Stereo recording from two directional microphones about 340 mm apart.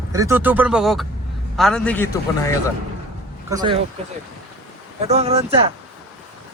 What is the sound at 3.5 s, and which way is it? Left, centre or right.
Speech, centre.